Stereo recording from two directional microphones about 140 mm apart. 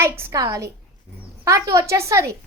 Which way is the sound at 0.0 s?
20° right (ahead or behind).